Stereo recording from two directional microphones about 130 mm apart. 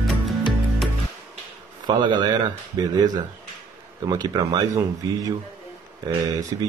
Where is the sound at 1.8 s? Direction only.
35° right (ahead or behind).